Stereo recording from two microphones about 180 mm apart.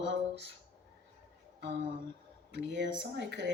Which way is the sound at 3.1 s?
75° right (ahead or behind).